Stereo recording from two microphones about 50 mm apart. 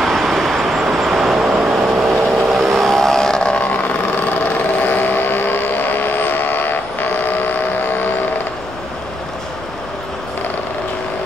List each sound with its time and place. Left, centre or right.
0.0 s vehicle: centre
4.3 s vehicle: left